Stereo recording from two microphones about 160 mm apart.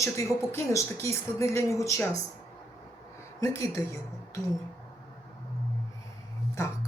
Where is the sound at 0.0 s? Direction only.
20° left (ahead or behind).